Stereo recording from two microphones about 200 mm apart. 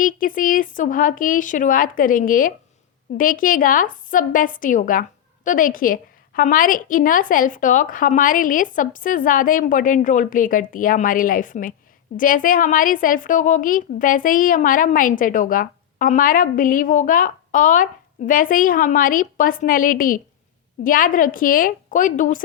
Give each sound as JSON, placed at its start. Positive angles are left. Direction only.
{"t": 0.0, "sound": "a woman's voice", "side_deg": 45}